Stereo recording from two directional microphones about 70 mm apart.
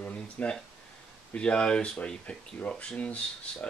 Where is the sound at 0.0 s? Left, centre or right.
Centre.